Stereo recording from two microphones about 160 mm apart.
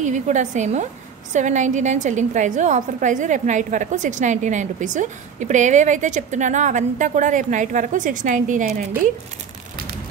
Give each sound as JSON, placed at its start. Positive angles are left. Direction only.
{"t": 0.0, "sound": "a woman's voice", "side_deg": -50}